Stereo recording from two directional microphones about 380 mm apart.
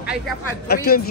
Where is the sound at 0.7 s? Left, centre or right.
Left.